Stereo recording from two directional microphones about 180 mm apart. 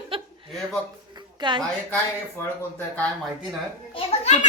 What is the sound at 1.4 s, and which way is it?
Speech, 25° right (ahead or behind).